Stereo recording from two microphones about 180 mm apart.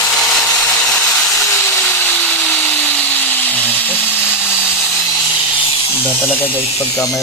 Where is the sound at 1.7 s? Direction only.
10° left (ahead or behind).